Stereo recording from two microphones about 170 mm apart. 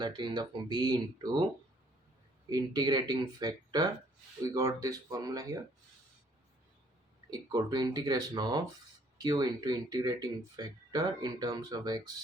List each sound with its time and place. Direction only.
0.0 s speech: 25° right (ahead or behind)
2.5 s speech: 25° right (ahead or behind)
7.3 s speech: 25° right (ahead or behind)